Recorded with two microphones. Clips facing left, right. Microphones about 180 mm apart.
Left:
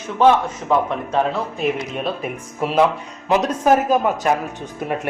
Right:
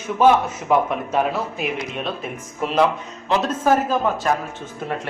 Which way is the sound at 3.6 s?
15° left (ahead or behind).